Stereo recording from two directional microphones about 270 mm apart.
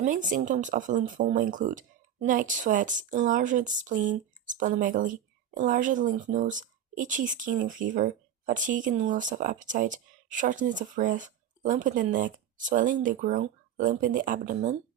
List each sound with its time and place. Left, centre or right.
0.0 s speech: right